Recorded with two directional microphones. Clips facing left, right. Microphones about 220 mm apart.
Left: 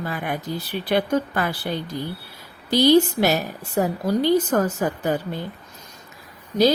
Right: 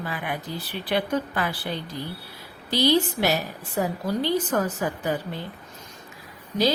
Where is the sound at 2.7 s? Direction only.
45° left (ahead or behind).